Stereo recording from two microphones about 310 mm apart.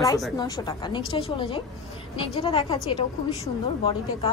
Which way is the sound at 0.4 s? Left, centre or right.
Centre.